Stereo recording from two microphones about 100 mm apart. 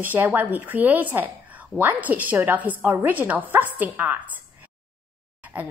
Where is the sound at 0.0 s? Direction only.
20° right (ahead or behind).